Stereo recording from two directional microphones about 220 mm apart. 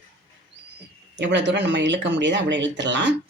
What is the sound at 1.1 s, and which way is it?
Speech, 50° right (ahead or behind).